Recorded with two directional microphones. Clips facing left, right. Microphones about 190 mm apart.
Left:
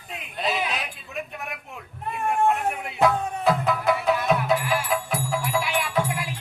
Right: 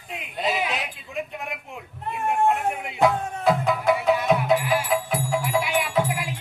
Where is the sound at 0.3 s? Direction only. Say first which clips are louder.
Right 1 dB; 20° right (ahead or behind).